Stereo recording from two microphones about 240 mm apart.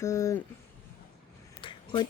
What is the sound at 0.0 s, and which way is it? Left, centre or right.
Speech, centre.